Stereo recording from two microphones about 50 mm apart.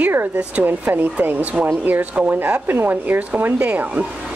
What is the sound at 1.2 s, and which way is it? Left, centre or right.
Speech, right.